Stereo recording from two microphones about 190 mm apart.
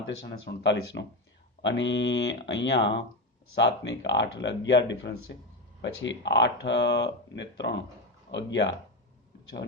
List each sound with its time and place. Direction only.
0.3 s speech: 65° left (ahead or behind)